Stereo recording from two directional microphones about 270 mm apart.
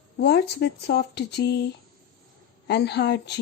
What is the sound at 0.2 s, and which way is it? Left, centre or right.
Speech, left.